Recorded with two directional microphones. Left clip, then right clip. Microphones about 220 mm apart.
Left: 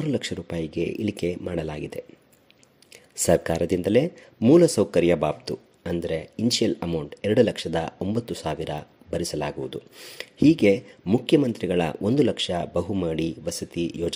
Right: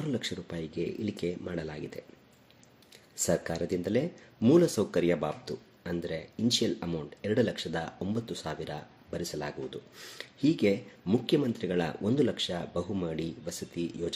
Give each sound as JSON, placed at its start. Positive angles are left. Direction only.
{"t": 0.0, "sound": "speech", "side_deg": 30}